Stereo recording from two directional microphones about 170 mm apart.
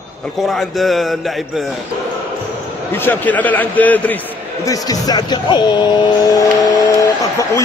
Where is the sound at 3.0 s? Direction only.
10° left (ahead or behind).